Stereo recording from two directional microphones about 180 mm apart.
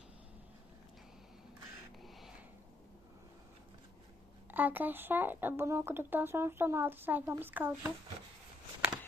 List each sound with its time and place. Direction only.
4.5 s speech: 10° right (ahead or behind)